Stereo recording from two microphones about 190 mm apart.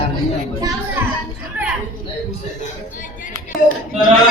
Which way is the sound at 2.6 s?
45° left (ahead or behind).